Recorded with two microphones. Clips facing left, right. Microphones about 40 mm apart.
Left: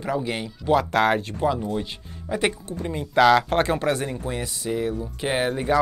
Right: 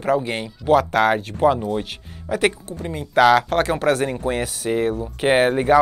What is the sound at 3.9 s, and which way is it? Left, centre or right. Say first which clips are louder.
Speech: right 5 dB; right.